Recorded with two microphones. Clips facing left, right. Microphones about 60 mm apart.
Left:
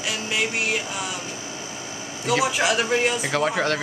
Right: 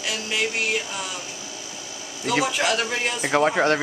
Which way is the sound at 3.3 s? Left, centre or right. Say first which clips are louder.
Right 5 dB; right.